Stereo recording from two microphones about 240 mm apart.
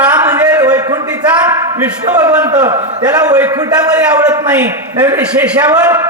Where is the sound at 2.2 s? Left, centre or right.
Centre.